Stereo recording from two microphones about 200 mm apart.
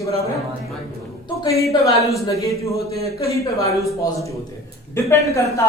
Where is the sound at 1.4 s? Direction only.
15° left (ahead or behind).